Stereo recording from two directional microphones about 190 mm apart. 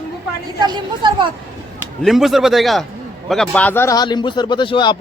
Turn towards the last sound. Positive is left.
turn(degrees=25)  # may be behind; listen again after turning